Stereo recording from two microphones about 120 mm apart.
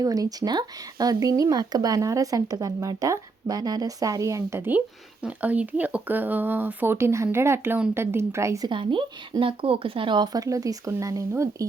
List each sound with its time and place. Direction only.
0.0 s a woman's voice: 30° right (ahead or behind)
8.6 s speech: 45° right (ahead or behind); by 11.4 s 25° right (ahead or behind)